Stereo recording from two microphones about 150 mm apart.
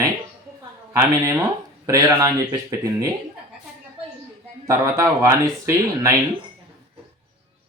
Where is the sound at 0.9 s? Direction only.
20° right (ahead or behind).